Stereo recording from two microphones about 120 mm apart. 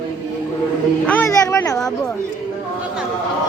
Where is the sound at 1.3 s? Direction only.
25° left (ahead or behind).